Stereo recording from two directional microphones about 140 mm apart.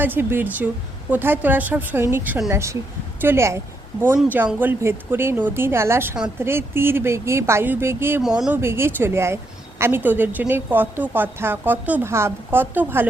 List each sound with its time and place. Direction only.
0.0 s a woman's voice: 15° right (ahead or behind)